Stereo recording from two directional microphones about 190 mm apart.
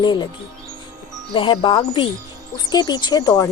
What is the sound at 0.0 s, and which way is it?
Speech, 25° left (ahead or behind).